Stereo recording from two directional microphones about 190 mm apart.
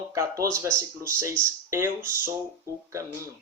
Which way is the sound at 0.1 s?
15° right (ahead or behind).